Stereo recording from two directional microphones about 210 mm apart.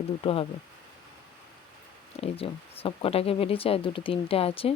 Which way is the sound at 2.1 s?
25° left (ahead or behind).